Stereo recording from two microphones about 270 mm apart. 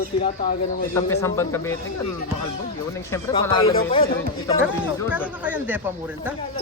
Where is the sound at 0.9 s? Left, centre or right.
Centre.